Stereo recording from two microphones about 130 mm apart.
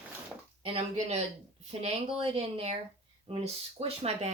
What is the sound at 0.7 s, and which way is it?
Speech, 55° right (ahead or behind).